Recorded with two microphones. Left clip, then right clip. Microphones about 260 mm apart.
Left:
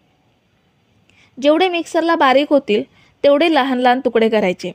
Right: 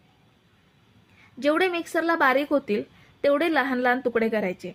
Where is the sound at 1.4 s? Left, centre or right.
Left.